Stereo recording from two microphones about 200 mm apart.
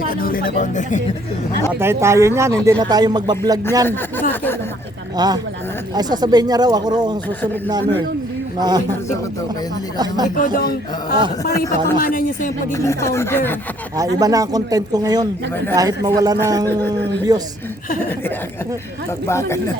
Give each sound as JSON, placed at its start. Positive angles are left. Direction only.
{"t": 0.0, "sound": "speech", "side_deg": 45}
{"t": 1.8, "sound": "speech", "side_deg": -15}
{"t": 3.8, "sound": "speech", "side_deg": 10}
{"t": 5.1, "sound": "speech", "side_deg": -20}
{"t": 8.5, "sound": "speech", "side_deg": -20}
{"t": 10.3, "sound": "speech", "side_deg": 45}
{"t": 11.5, "sound": "speech", "side_deg": 15}
{"t": 12.0, "sound": "a sound", "side_deg": 45}
{"t": 12.7, "sound": "speech", "side_deg": 15}
{"t": 14.2, "sound": "speech", "side_deg": -15}
{"t": 19.3, "sound": "speech", "side_deg": 15}